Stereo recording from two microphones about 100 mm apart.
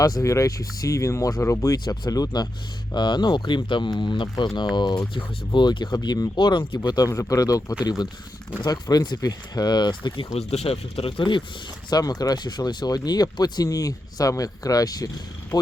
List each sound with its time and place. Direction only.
0.0 s speech: 35° left (ahead or behind); by 6.9 s 55° left (ahead or behind)
6.9 s speech: 35° left (ahead or behind)
10.3 s speech: 90° left; by 11.4 s 55° left (ahead or behind)
11.9 s speech: 40° left (ahead or behind)